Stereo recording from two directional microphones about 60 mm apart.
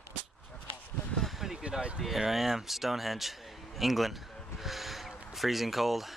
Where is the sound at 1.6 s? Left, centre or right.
Centre.